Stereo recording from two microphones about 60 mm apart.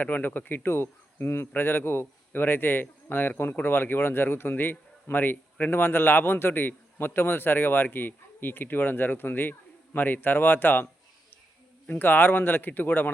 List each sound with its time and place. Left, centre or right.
0.0 s speech: left
11.9 s speech: left